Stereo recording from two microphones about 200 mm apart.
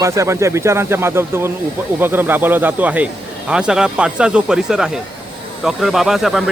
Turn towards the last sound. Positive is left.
turn(degrees=0)  # may be behind; listen again after turning